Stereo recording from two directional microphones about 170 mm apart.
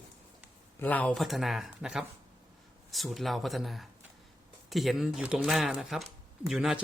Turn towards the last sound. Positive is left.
turn(degrees=0)  # may be behind; listen again after turning